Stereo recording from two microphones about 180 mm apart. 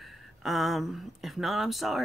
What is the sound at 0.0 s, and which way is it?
Speech, centre (ahead or behind).